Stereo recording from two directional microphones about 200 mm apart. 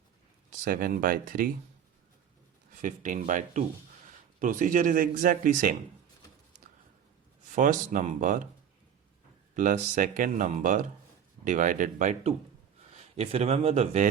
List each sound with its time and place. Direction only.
0.6 s speech: 45° right (ahead or behind)
2.8 s speech: 40° right (ahead or behind)
7.5 s speech: 40° right (ahead or behind)
9.6 s a man's voice: 40° right (ahead or behind)